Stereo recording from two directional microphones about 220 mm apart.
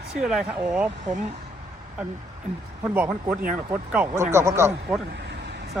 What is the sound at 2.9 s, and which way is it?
Speech, 10° right (ahead or behind).